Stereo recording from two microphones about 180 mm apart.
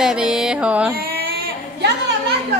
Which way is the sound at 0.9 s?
55° right (ahead or behind).